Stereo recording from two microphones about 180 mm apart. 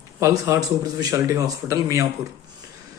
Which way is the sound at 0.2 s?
15° right (ahead or behind).